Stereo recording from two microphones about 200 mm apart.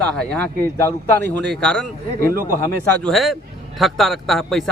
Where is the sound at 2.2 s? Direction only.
45° right (ahead or behind).